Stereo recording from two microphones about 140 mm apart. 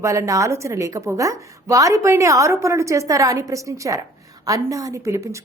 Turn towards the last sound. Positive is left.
turn(degrees=-20)  # may be behind; listen again after turning